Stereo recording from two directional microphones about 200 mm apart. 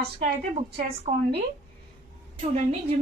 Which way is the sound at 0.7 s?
50° right (ahead or behind).